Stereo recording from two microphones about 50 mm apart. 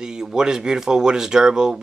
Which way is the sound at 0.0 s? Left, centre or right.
Centre.